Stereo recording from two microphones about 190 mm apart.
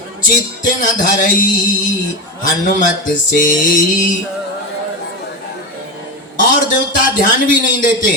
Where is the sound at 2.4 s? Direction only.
45° left (ahead or behind).